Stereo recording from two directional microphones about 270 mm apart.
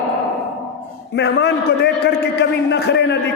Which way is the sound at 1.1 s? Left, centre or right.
Left.